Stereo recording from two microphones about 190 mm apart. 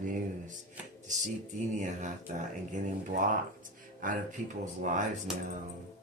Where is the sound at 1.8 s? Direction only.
40° right (ahead or behind).